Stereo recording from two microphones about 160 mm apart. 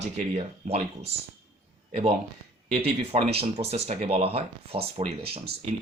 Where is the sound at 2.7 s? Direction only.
40° right (ahead or behind).